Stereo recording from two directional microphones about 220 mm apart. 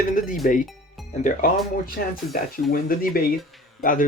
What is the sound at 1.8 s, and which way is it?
Speech, 40° left (ahead or behind).